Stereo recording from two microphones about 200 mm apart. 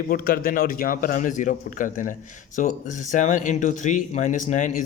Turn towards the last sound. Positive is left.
turn(degrees=40)  # may be behind; listen again after turning